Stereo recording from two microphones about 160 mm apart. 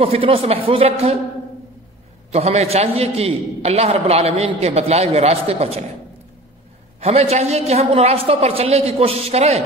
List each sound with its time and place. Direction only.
0.0 s a man's voice: 35° right (ahead or behind)
2.3 s a man's voice: 40° right (ahead or behind)
7.0 s a man's voice: 40° right (ahead or behind)